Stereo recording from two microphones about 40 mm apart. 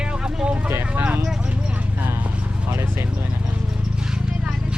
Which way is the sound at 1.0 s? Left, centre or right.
Right.